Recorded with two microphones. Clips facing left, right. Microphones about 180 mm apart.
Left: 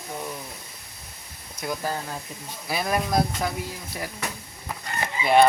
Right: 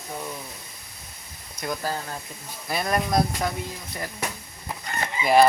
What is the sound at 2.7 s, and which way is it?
Speech, 5° left (ahead or behind).